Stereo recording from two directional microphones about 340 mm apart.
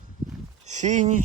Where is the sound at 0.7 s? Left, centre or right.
Right.